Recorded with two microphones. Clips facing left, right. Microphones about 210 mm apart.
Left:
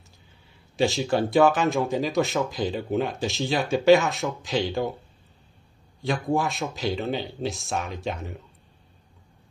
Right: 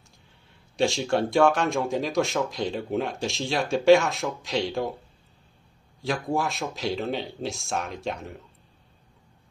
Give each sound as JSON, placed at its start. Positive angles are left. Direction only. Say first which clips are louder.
{"t": 0.7, "sound": "speech", "louder": "left 1 dB", "side_deg": 0}
{"t": 5.9, "sound": "speech", "louder": "left 2 dB", "side_deg": 0}